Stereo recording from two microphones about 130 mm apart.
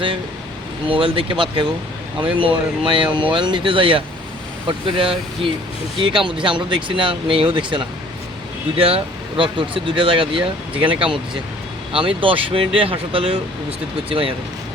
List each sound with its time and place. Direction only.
0.9 s speech: 45° right (ahead or behind)
9.4 s speech: 40° right (ahead or behind)